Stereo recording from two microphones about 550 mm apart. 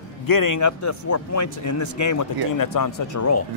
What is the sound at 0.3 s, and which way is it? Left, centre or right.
A man's voice, left.